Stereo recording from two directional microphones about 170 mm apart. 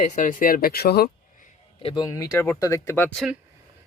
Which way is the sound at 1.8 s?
30° left (ahead or behind).